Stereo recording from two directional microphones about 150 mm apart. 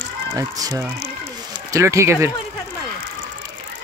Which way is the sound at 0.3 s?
25° right (ahead or behind).